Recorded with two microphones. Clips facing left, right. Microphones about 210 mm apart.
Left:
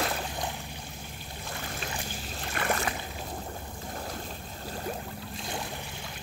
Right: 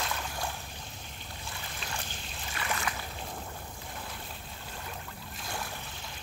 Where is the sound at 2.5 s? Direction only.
45° left (ahead or behind).